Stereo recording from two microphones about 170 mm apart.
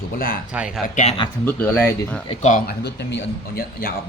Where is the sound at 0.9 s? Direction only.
35° left (ahead or behind).